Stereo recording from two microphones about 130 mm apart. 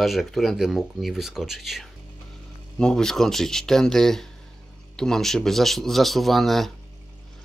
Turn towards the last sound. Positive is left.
turn(degrees=0)  # may be behind; listen again after turning